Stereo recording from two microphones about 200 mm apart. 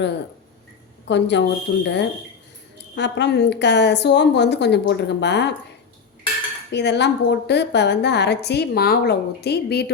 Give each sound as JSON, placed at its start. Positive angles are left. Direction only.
{"t": 1.0, "sound": "a woman's voice", "side_deg": 60}
{"t": 6.7, "sound": "a woman's voice", "side_deg": 60}